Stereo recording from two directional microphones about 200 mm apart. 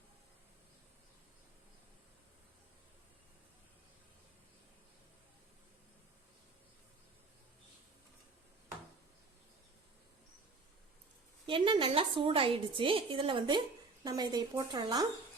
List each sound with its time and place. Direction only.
11.4 s a woman's voice: 25° right (ahead or behind)